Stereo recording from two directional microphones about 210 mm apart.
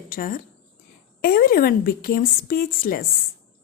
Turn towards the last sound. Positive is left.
turn(degrees=45)  # may be behind; listen again after turning